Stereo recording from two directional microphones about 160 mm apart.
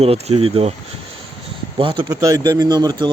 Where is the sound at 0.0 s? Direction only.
40° right (ahead or behind).